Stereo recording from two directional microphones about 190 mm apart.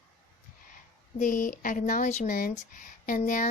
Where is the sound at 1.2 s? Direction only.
45° left (ahead or behind).